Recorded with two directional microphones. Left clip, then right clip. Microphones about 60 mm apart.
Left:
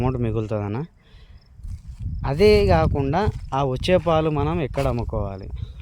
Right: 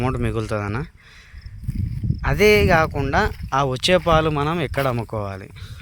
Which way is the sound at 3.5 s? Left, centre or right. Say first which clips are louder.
Right 2 dB; centre.